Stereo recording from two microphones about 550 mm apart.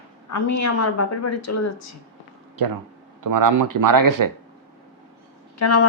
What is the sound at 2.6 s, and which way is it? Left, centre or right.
Speech, right.